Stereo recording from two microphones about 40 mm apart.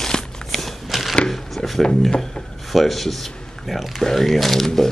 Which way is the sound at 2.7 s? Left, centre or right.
Centre.